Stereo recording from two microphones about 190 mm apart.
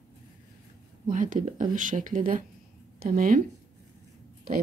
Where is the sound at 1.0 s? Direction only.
45° right (ahead or behind).